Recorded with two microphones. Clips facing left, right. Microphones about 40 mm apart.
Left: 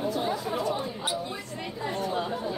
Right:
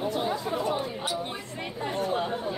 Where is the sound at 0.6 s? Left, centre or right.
Right.